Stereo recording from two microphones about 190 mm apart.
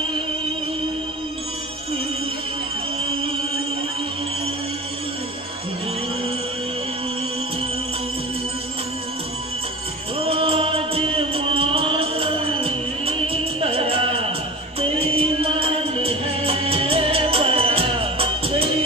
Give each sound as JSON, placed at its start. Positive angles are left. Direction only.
{"t": 10.1, "sound": "music", "side_deg": -30}